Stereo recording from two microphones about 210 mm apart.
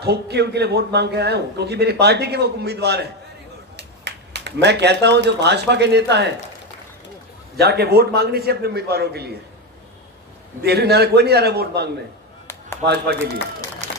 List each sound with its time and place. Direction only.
0.0 s a man's voice: 50° right (ahead or behind)
7.6 s a man's voice: 50° right (ahead or behind)
10.6 s a man's voice: 50° right (ahead or behind)
13.8 s a sound: 35° right (ahead or behind)